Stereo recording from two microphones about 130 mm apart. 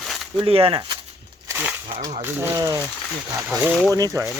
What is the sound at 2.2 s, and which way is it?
Speech, 15° right (ahead or behind).